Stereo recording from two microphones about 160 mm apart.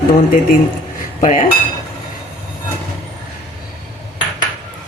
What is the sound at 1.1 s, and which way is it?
Dishes, 50° left (ahead or behind).